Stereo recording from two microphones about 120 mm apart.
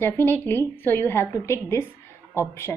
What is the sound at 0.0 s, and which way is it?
A woman's voice, 20° left (ahead or behind).